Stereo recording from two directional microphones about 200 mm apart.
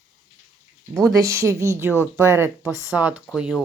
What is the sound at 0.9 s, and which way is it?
Speech, centre (ahead or behind).